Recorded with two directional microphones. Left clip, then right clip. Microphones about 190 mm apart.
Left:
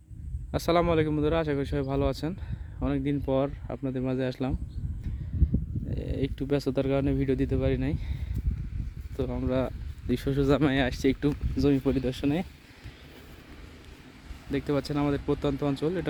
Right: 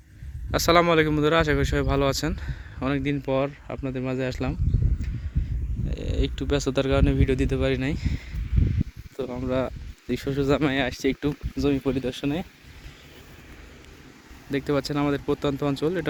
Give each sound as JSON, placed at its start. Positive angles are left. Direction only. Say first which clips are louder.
{"t": 0.5, "sound": "speech", "louder": "right 6 dB", "side_deg": 0}
{"t": 5.9, "sound": "speech", "louder": "right 3 dB", "side_deg": 10}
{"t": 14.5, "sound": "speech", "louder": "right 4 dB", "side_deg": 0}